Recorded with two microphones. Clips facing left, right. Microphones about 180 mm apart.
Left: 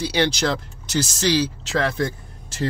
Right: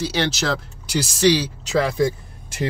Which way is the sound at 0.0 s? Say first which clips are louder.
Left 1 dB; centre (ahead or behind).